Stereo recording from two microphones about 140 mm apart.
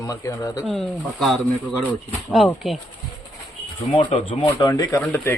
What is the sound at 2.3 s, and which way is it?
Speech, centre (ahead or behind).